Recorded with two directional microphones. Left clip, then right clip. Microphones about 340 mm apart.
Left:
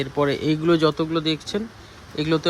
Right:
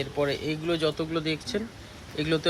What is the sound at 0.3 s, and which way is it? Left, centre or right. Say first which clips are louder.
Speech: left 7 dB; left.